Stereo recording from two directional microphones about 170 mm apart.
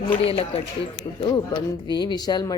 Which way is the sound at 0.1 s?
35° left (ahead or behind).